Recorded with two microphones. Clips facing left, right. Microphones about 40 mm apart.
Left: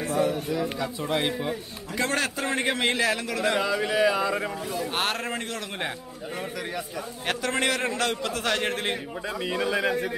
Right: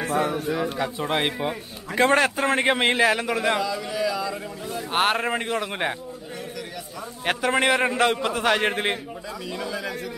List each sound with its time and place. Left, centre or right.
0.0 s a man's voice: right
0.5 s a man's voice: right
3.6 s a sound: left
4.7 s a man's voice: centre
7.2 s a man's voice: centre
9.5 s a sound: left